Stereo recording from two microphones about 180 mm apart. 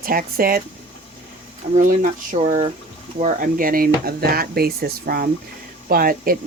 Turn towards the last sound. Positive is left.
turn(degrees=-55)  # may be behind; listen again after turning